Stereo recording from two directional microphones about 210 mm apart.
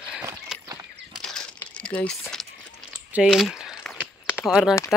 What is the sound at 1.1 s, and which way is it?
Bird flight, 5° left (ahead or behind).